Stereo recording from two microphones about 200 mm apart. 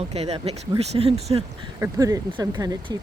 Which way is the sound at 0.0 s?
30° right (ahead or behind).